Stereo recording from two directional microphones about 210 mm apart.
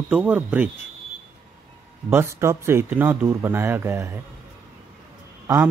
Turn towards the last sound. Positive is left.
turn(degrees=-10)  # may be behind; listen again after turning